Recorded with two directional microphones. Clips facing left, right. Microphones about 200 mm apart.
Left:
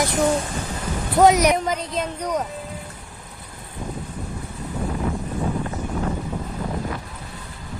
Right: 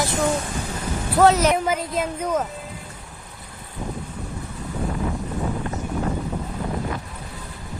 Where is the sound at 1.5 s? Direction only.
5° right (ahead or behind).